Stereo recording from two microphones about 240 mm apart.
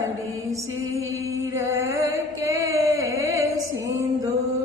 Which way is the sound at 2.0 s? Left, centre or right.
Centre.